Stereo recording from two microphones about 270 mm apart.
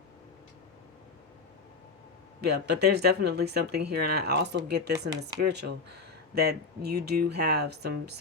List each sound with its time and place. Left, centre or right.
2.4 s speech: right